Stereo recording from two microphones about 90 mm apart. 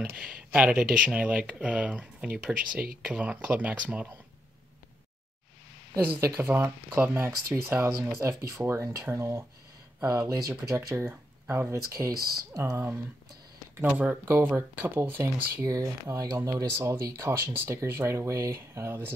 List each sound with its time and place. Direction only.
0.0 s speech: 15° right (ahead or behind)
5.9 s speech: 20° right (ahead or behind); by 10.4 s 40° right (ahead or behind)
11.0 s speech: 25° right (ahead or behind)
11.7 s speech: 35° right (ahead or behind)
16.7 s speech: 25° right (ahead or behind)
17.0 s speech: 35° right (ahead or behind)